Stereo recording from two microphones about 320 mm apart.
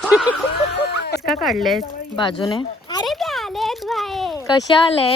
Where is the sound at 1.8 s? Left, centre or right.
Centre.